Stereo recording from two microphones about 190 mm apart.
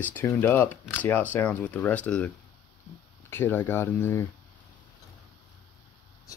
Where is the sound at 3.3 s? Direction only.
10° left (ahead or behind).